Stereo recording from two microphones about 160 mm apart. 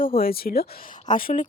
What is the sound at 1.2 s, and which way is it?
Speech, 55° left (ahead or behind).